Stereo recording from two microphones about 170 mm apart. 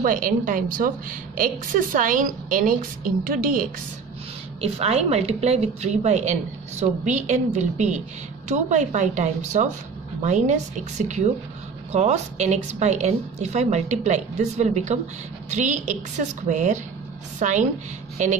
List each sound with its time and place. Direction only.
0.0 s a woman's voice: 50° right (ahead or behind)
4.6 s a woman's voice: 40° right (ahead or behind)